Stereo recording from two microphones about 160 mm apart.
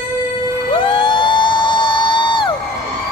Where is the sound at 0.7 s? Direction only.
30° left (ahead or behind).